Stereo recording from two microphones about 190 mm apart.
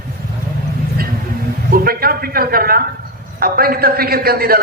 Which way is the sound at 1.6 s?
50° right (ahead or behind).